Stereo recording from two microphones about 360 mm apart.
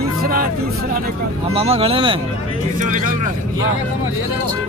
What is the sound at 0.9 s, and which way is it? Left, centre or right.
Speech, centre.